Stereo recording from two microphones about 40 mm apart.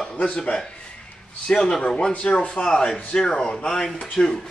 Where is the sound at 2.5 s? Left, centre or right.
Centre.